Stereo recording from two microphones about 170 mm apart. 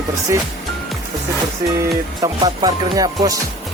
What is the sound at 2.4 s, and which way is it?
Music, 25° right (ahead or behind).